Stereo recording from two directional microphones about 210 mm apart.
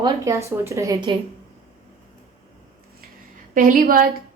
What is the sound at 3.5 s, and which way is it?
Speech, 45° right (ahead or behind).